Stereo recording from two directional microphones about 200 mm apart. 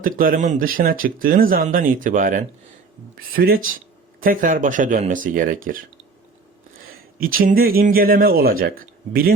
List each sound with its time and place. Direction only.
0.0 s speech: 45° right (ahead or behind)
7.2 s speech: 45° right (ahead or behind)